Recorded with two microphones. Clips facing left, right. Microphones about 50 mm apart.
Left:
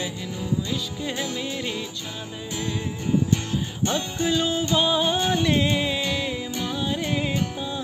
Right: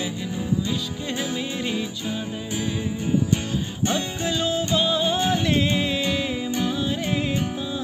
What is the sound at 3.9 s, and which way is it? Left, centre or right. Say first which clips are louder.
Music: left 1 dB; centre.